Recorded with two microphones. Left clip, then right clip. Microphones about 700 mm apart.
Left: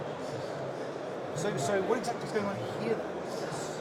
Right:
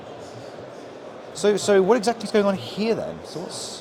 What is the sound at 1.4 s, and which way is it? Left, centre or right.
Speech, right.